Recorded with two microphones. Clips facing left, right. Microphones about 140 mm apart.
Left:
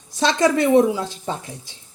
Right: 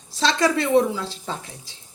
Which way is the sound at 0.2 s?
20° left (ahead or behind).